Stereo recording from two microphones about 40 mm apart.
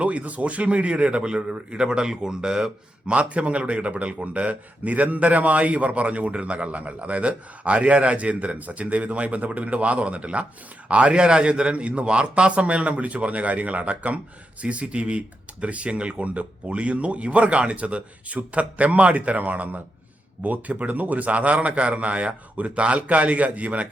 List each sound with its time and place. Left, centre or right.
0.0 s a man's voice: right; by 3.2 s centre
3.2 s a man's voice: right